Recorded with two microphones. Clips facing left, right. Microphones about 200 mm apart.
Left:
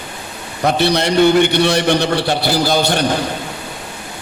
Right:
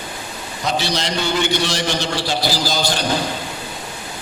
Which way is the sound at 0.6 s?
60° left (ahead or behind).